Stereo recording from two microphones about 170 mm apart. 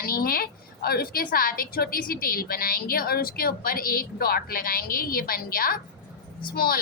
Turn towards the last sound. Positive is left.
turn(degrees=60)  # may be behind; listen again after turning